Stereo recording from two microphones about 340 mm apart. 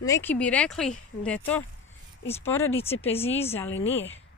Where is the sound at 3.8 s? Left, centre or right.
Centre.